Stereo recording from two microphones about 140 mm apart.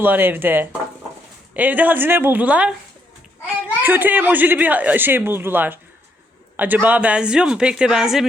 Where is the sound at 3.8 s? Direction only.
15° right (ahead or behind).